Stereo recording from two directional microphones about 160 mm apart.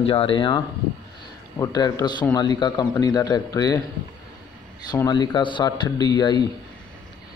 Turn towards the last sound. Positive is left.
turn(degrees=25)  # may be behind; listen again after turning